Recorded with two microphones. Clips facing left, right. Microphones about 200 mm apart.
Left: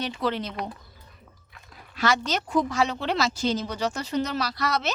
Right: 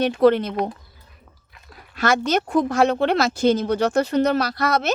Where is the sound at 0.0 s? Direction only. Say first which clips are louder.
Right 12 dB; 55° right (ahead or behind).